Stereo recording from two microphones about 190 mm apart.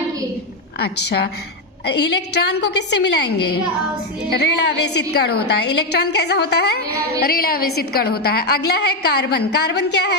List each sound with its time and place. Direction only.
0.8 s a woman's voice: 60° left (ahead or behind)
4.3 s a woman's voice: 65° left (ahead or behind)